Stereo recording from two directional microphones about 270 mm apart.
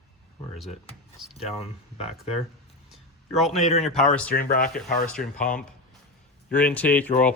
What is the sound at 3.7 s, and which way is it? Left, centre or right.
Speech, left.